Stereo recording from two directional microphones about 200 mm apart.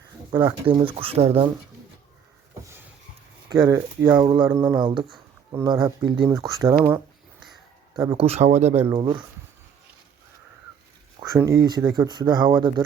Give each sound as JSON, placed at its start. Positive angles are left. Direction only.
{"t": 0.3, "sound": "speech", "side_deg": -25}
{"t": 3.5, "sound": "speech", "side_deg": -20}
{"t": 7.9, "sound": "speech", "side_deg": -25}
{"t": 8.7, "sound": "speech", "side_deg": -10}
{"t": 11.2, "sound": "speech", "side_deg": -15}